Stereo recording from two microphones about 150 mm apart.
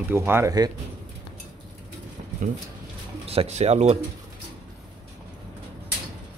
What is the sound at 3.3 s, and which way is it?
Speech, 45° right (ahead or behind).